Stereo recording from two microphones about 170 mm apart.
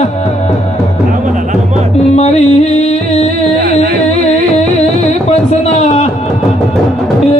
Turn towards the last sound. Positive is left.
turn(degrees=40)  # may be behind; listen again after turning